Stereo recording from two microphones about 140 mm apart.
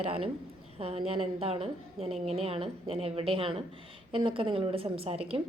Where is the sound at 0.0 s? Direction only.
45° right (ahead or behind).